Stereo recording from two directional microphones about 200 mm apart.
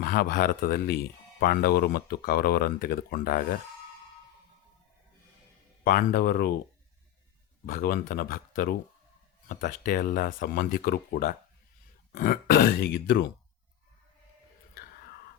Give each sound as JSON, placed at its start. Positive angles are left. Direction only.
{"t": 0.0, "sound": "speech", "side_deg": 50}
{"t": 5.8, "sound": "speech", "side_deg": 45}
{"t": 7.7, "sound": "speech", "side_deg": 45}